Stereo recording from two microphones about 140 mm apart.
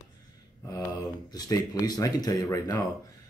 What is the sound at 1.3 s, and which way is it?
Speech, 25° left (ahead or behind).